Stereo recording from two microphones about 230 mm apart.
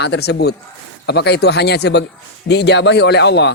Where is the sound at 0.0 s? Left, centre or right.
Left.